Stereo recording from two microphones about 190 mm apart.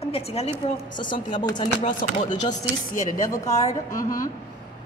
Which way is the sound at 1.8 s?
45° left (ahead or behind).